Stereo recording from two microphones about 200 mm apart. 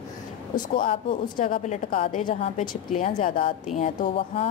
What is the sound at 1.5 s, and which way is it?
A woman's voice, 35° left (ahead or behind).